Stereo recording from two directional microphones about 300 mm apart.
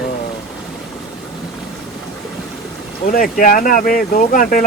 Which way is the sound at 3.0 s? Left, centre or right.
Left.